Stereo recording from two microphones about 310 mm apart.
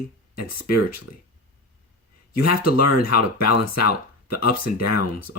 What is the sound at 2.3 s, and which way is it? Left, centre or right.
Speech, left.